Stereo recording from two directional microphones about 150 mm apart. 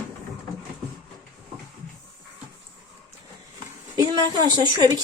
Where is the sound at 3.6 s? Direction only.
25° right (ahead or behind).